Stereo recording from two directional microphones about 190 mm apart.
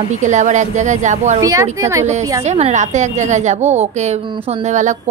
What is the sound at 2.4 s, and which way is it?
A woman's voice, 35° right (ahead or behind).